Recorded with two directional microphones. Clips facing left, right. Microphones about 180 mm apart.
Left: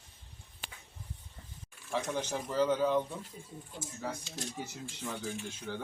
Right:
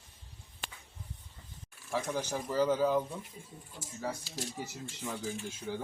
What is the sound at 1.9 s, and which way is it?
Speech, 5° right (ahead or behind).